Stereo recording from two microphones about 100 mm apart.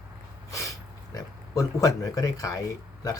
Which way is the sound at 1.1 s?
35° left (ahead or behind).